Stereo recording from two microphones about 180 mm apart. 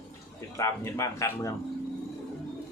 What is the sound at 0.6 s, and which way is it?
Speech, 15° left (ahead or behind).